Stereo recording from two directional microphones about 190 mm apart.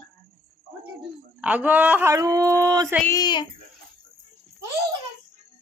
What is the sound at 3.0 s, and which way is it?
Speech, 20° left (ahead or behind).